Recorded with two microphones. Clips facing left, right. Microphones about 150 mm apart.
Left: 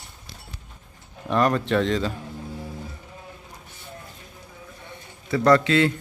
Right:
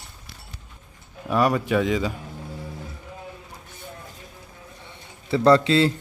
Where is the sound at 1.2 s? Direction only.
5° right (ahead or behind).